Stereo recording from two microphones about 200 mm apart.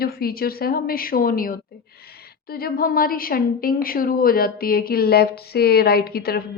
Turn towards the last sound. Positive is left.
turn(degrees=50)  # may be behind; listen again after turning